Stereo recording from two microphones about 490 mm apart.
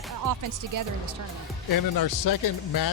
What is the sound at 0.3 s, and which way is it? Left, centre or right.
Speech, right.